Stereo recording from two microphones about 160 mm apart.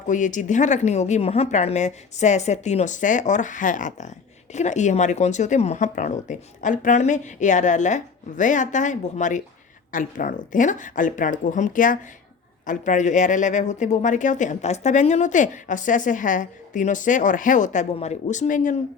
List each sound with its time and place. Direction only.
0.1 s speech: 50° left (ahead or behind)